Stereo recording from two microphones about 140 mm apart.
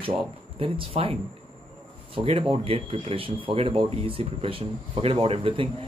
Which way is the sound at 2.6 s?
40° right (ahead or behind).